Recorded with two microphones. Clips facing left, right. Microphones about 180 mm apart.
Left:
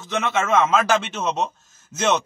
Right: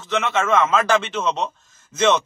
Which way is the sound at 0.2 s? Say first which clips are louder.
Even; 10° left (ahead or behind).